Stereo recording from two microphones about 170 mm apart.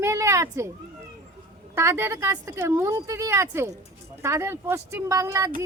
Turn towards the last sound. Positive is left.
turn(degrees=-15)  # may be behind; listen again after turning